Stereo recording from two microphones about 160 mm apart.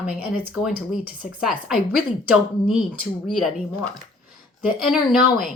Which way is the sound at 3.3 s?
Centre (ahead or behind).